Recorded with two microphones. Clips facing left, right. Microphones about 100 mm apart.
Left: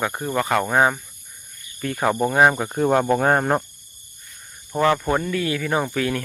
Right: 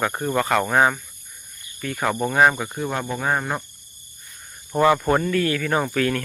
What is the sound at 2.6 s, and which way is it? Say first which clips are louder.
Speech: left 7 dB; 40° left (ahead or behind).